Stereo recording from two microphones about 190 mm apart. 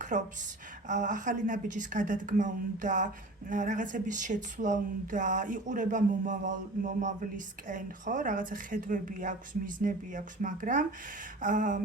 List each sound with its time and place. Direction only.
0.1 s speech: 40° right (ahead or behind)